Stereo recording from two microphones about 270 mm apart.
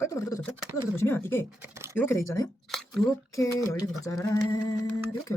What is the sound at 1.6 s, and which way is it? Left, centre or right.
Speech, centre.